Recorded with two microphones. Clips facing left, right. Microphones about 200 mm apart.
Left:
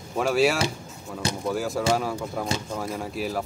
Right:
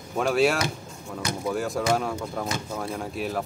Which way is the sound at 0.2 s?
Centre (ahead or behind).